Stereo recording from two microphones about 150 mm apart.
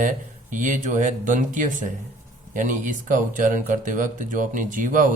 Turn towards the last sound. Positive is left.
turn(degrees=-60)  # may be behind; listen again after turning